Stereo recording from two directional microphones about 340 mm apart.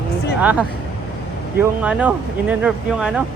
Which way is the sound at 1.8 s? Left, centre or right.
Centre.